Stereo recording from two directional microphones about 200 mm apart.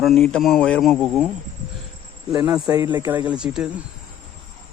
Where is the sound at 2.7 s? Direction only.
20° right (ahead or behind).